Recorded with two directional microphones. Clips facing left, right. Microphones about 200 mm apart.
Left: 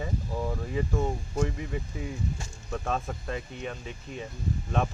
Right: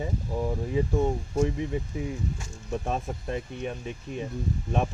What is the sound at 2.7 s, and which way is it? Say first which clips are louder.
Speech: right 1 dB; 15° right (ahead or behind).